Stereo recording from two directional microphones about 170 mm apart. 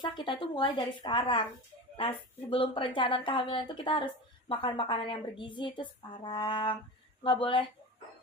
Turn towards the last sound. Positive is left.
turn(degrees=30)  # may be behind; listen again after turning